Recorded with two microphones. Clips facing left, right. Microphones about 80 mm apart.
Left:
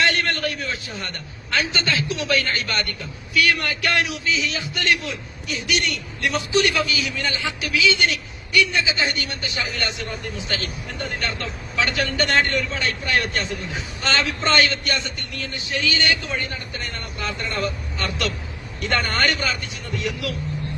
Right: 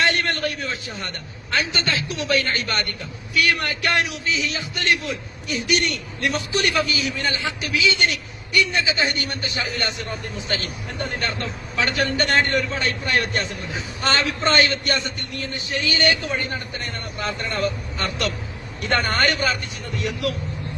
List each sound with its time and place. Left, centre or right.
0.0 s a sound: right
1.0 s a man's voice: right
18.8 s a man's voice: right